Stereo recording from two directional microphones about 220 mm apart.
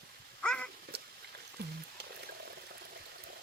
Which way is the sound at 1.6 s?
45° right (ahead or behind).